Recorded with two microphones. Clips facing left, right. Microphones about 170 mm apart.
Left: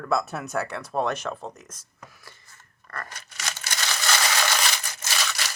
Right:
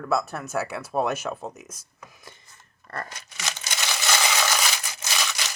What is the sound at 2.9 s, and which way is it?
Scissors, 25° right (ahead or behind).